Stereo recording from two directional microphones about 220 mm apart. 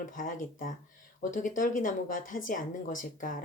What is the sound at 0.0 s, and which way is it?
A woman's voice, 35° left (ahead or behind).